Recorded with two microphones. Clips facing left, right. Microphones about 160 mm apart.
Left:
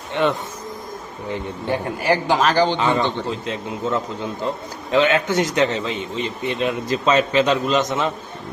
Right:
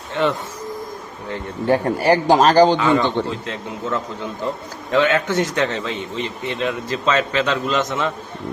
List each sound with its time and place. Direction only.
0.1 s speech: 20° left (ahead or behind)
1.8 s a man's voice: 40° right (ahead or behind)
2.7 s a man's voice: 20° left (ahead or behind)